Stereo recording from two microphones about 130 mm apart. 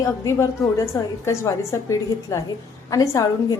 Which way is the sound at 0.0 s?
25° left (ahead or behind).